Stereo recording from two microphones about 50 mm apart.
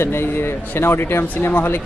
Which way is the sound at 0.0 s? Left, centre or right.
Left.